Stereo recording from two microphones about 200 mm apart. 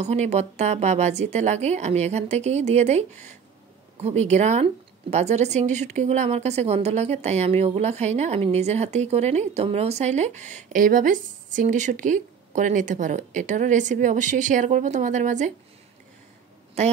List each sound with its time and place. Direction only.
0.0 s a woman's voice: 35° right (ahead or behind)